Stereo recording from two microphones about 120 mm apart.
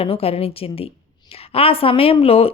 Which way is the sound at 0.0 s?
55° left (ahead or behind).